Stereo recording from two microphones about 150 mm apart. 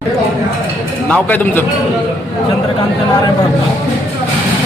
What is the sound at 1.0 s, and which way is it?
Speech, 10° left (ahead or behind).